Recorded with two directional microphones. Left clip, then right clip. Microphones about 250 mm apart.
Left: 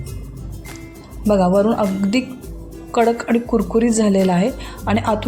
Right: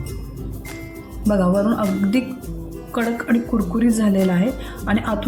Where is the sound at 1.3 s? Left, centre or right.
Left.